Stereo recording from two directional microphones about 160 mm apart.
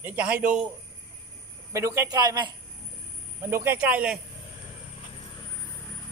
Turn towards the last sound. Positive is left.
turn(degrees=-5)  # may be behind; listen again after turning